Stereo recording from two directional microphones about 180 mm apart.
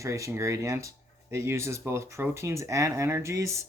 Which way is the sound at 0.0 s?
15° right (ahead or behind).